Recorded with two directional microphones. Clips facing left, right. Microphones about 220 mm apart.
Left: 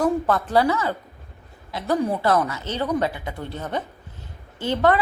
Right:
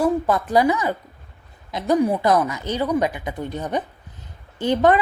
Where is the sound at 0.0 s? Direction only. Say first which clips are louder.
Right 1 dB; 10° right (ahead or behind).